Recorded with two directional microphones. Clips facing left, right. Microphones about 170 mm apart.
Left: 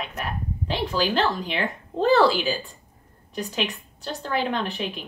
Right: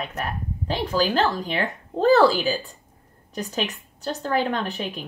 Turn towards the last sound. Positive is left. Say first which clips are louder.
# even
turn(degrees=-40)  # may be behind; listen again after turning